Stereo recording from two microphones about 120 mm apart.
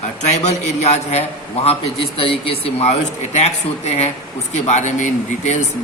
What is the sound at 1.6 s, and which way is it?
A man's voice, 50° left (ahead or behind).